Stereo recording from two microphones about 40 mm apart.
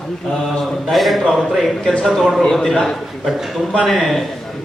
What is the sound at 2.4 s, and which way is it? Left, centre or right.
A man's voice, centre.